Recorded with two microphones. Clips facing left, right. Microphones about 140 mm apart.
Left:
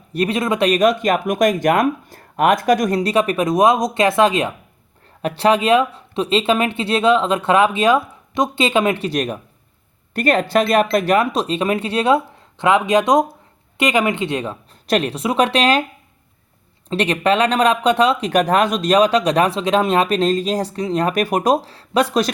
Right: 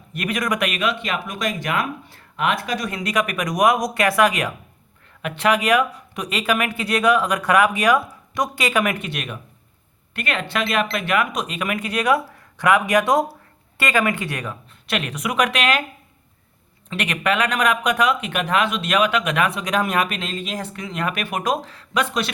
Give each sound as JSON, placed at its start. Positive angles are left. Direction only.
{"t": 0.1, "sound": "speech", "side_deg": 30}
{"t": 3.0, "sound": "speech", "side_deg": 30}
{"t": 14.8, "sound": "speech", "side_deg": 35}
{"t": 16.9, "sound": "speech", "side_deg": 30}